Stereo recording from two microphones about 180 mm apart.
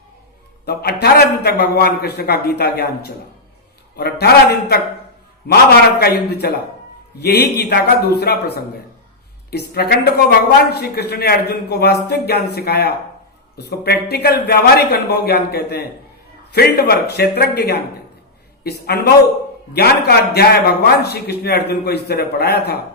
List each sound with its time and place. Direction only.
0.6 s a man's voice: 60° left (ahead or behind)
5.5 s a man's voice: 65° left (ahead or behind)